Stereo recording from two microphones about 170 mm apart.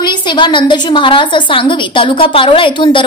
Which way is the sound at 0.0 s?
25° left (ahead or behind).